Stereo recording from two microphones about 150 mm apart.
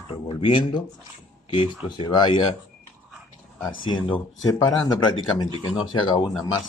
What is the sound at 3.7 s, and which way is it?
Speech, 35° left (ahead or behind).